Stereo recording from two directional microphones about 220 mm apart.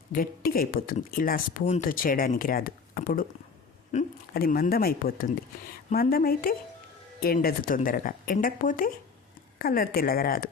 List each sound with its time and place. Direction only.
0.1 s speech: 40° left (ahead or behind)